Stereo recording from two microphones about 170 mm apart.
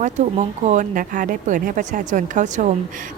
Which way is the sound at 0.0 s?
45° right (ahead or behind).